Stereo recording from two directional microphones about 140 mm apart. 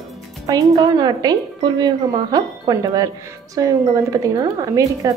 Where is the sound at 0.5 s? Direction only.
30° right (ahead or behind).